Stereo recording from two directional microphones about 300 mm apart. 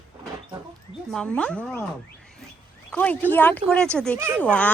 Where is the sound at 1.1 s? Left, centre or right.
Centre.